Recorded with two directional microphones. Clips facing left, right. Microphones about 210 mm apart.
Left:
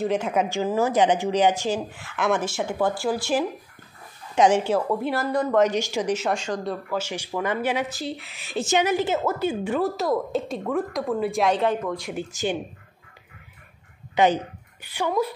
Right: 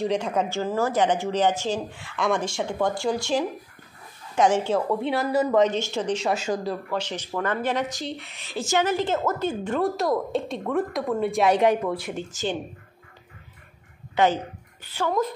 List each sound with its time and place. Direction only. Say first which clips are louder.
0.0 s a woman's voice: left 1 dB; 5° left (ahead or behind)
1.9 s a woman's voice: left 1 dB; centre (ahead or behind)
4.4 s a woman's voice: left 2 dB; 15° left (ahead or behind)
4.7 s a woman's voice: even; centre (ahead or behind)
5.8 s a woman's voice: left 1 dB; 10° left (ahead or behind)
6.3 s a woman's voice: right 1 dB; 5° right (ahead or behind)
8.5 s a woman's voice: left 1 dB; 20° left (ahead or behind); by 11.5 s centre (ahead or behind)
11.5 s speech: right 3 dB; 10° right (ahead or behind)
12.2 s a woman's voice: left 2 dB; 15° left (ahead or behind)
14.1 s a woman's voice: left 1 dB; 15° left (ahead or behind)